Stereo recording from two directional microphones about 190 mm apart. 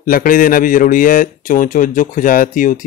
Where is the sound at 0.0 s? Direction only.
50° left (ahead or behind).